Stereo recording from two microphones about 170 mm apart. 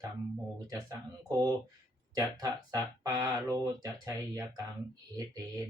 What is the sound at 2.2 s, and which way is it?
Speech, 25° right (ahead or behind).